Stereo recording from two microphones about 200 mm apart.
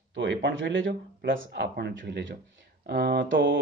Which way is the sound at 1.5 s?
55° right (ahead or behind).